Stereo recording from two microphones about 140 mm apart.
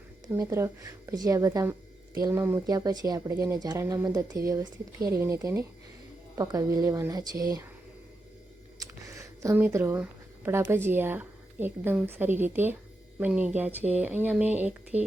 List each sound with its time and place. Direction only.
0.3 s speech: 20° right (ahead or behind)
8.8 s speech: 20° right (ahead or behind)